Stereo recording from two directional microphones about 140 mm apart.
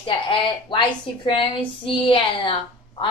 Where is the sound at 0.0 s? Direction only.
35° left (ahead or behind).